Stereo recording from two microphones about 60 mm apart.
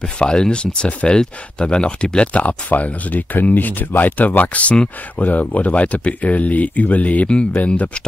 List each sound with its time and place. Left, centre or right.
0.2 s speech: centre